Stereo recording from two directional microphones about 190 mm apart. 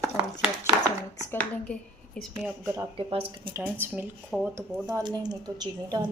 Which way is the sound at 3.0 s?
30° right (ahead or behind).